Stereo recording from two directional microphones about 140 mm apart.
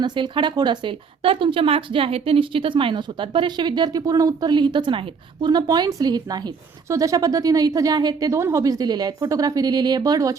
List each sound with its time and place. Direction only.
0.0 s speech: 35° right (ahead or behind)